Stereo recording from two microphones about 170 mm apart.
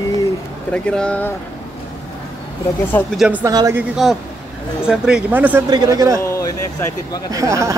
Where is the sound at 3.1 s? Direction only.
5° right (ahead or behind).